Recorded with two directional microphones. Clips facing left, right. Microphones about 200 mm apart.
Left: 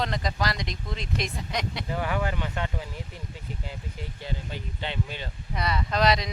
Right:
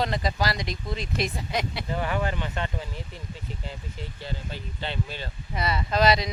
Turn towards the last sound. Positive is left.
turn(degrees=0)  # may be behind; listen again after turning